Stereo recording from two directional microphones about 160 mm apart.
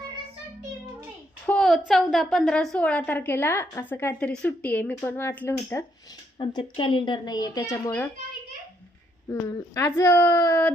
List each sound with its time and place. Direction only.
1.5 s a sound: 5° left (ahead or behind)
1.9 s a woman's voice: centre (ahead or behind)
6.4 s a child's voice: 30° left (ahead or behind)
9.3 s a child's voice: 20° left (ahead or behind)